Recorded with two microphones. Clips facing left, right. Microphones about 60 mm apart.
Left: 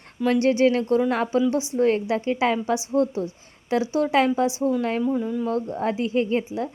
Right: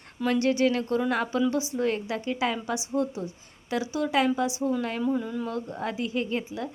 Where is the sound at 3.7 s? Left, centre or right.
Left.